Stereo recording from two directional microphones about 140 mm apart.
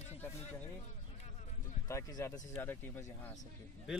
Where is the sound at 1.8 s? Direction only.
20° left (ahead or behind).